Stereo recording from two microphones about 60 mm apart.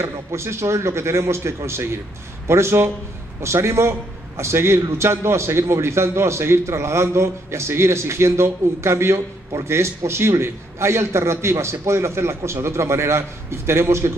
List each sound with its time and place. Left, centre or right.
0.0 s a man's voice: right